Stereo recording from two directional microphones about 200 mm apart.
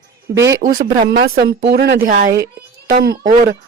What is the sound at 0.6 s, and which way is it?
A woman's voice, 45° right (ahead or behind).